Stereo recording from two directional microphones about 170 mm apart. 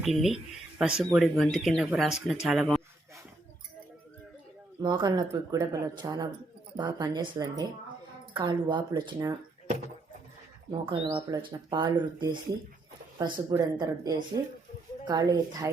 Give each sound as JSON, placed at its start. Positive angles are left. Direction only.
{"t": 0.0, "sound": "speech", "side_deg": 0}
{"t": 4.8, "sound": "speech", "side_deg": -25}
{"t": 10.7, "sound": "speech", "side_deg": -30}